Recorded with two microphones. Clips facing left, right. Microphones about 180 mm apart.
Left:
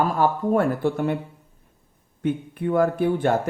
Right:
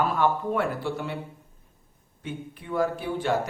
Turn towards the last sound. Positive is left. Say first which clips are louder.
# left 6 dB
turn(degrees=55)  # may be behind; listen again after turning